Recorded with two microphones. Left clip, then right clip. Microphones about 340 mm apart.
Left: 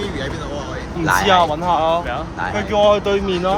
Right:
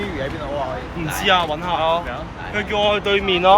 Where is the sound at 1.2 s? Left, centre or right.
Left.